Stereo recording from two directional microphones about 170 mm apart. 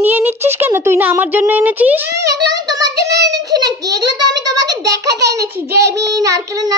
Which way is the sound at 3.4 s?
20° right (ahead or behind).